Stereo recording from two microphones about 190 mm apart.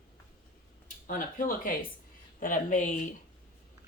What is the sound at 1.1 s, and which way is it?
Speech, 45° left (ahead or behind).